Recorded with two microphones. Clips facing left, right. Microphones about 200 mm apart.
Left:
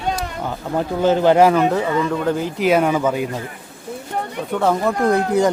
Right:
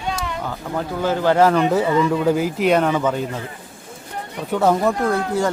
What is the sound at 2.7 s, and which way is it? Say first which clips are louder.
Speech: left 2 dB; 10° left (ahead or behind).